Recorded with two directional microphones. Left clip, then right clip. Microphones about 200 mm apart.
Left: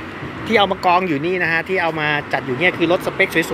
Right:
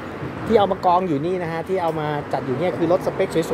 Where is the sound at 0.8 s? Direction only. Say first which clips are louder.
Left 2 dB; centre (ahead or behind).